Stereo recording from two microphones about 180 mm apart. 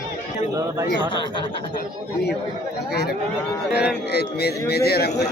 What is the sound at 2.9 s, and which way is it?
Speech, 60° left (ahead or behind).